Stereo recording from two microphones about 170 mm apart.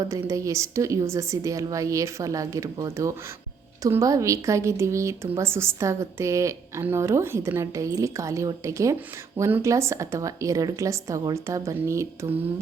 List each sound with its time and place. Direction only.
0.1 s a woman's voice: 20° right (ahead or behind)